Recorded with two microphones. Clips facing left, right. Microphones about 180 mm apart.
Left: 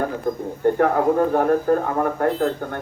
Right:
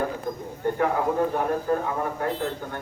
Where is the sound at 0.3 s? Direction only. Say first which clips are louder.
Left 7 dB; 55° left (ahead or behind).